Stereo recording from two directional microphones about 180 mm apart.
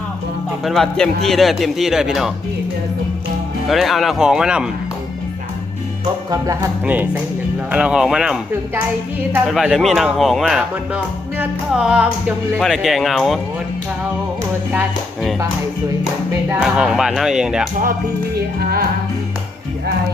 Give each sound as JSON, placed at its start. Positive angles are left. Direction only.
{"t": 0.6, "sound": "speech", "side_deg": 0}
{"t": 3.7, "sound": "speech", "side_deg": 0}
{"t": 6.3, "sound": "speech", "side_deg": -15}
{"t": 14.7, "sound": "speech", "side_deg": -5}
{"t": 16.5, "sound": "speech", "side_deg": -5}
{"t": 18.3, "sound": "music", "side_deg": -60}